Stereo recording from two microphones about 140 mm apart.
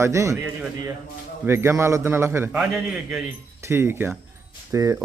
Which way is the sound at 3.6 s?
20° right (ahead or behind).